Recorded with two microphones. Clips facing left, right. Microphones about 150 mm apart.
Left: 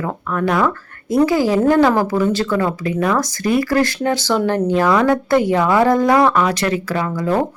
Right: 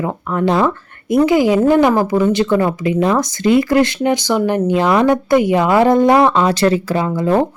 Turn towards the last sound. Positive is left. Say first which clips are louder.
# right 3 dB
turn(degrees=-20)  # may be behind; listen again after turning